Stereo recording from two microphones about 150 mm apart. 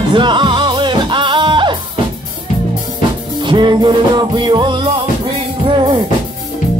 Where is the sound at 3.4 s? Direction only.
30° right (ahead or behind).